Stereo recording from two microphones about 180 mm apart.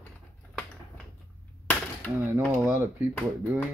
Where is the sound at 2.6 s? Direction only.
10° right (ahead or behind).